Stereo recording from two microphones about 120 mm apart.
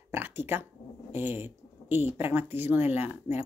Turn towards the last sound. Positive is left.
turn(degrees=-15)  # may be behind; listen again after turning